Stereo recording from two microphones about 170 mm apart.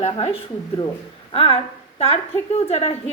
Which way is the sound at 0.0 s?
35° left (ahead or behind).